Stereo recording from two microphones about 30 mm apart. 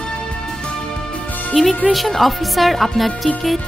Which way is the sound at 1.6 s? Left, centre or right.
Centre.